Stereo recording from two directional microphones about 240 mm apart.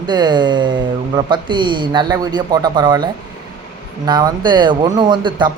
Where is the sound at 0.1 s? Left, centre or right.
Centre.